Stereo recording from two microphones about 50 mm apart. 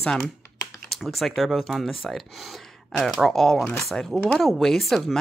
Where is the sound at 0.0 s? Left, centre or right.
Centre.